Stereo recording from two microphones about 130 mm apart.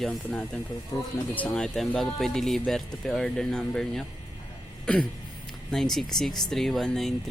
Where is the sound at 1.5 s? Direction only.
5° left (ahead or behind).